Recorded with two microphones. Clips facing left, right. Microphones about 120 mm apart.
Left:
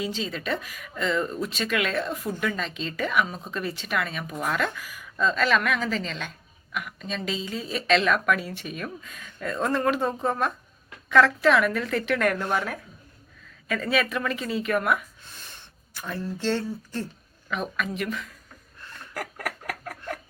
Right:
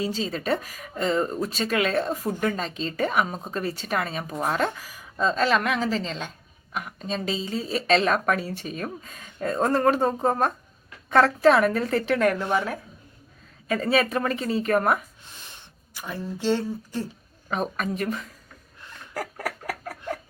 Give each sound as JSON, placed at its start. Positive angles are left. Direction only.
{"t": 0.0, "sound": "a woman's voice", "side_deg": -35}
{"t": 12.4, "sound": "a woman's voice", "side_deg": -15}
{"t": 13.7, "sound": "a woman's voice", "side_deg": -35}
{"t": 15.4, "sound": "speech", "side_deg": -15}
{"t": 17.5, "sound": "a woman's voice", "side_deg": -40}
{"t": 19.1, "sound": "chicken", "side_deg": -30}